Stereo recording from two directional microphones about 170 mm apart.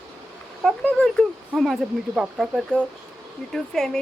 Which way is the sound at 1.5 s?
Centre (ahead or behind).